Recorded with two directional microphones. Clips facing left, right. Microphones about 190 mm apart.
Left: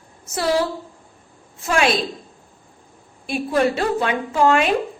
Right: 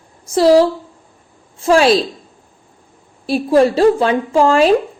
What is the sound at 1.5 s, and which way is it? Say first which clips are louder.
Speech: right 8 dB; 30° right (ahead or behind).